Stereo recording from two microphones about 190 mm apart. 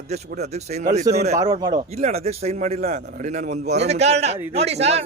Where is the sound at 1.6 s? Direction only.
20° right (ahead or behind).